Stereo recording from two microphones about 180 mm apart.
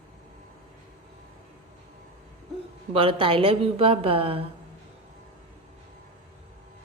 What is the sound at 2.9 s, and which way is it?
A woman's voice, 30° right (ahead or behind).